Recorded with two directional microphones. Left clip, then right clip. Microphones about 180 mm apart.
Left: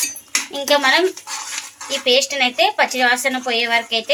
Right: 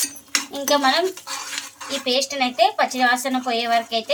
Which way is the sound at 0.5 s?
20° left (ahead or behind).